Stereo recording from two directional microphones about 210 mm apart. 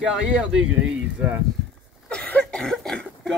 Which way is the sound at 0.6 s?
5° right (ahead or behind).